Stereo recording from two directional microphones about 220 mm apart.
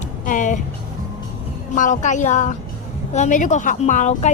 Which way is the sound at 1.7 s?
35° left (ahead or behind).